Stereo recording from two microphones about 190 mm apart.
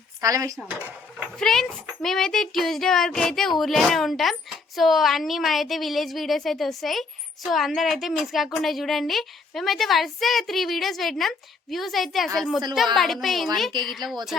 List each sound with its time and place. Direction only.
0.2 s dishes: 15° right (ahead or behind)
1.4 s speech: 5° left (ahead or behind)